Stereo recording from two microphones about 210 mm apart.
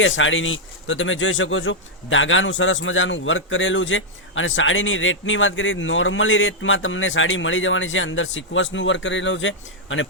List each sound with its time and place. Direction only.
0.0 s speech: 65° left (ahead or behind)